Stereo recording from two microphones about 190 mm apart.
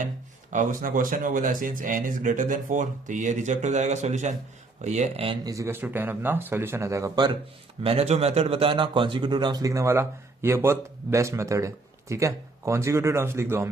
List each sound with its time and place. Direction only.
0.5 s a man's voice: 45° right (ahead or behind); by 7.3 s 20° right (ahead or behind)
7.8 s a man's voice: 30° right (ahead or behind); by 13.7 s 15° right (ahead or behind)